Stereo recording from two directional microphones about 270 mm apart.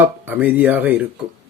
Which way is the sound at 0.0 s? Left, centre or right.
Centre.